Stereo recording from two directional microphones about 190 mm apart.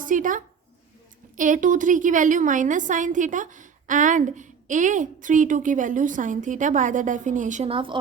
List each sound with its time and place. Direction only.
0.0 s a woman's voice: 45° right (ahead or behind); by 7.9 s 30° right (ahead or behind)